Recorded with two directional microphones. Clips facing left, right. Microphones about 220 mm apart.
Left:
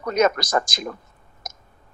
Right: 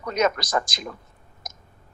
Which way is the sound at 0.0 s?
45° left (ahead or behind).